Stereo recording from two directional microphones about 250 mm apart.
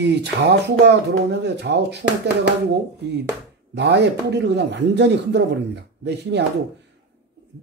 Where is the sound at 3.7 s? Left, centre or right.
Right.